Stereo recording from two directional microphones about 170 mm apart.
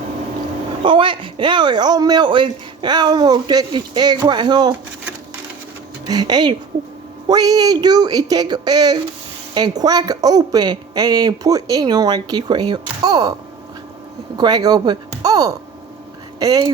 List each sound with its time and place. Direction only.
0.9 s speech: 30° right (ahead or behind)
6.1 s speech: 25° right (ahead or behind)
14.3 s speech: 25° right (ahead or behind)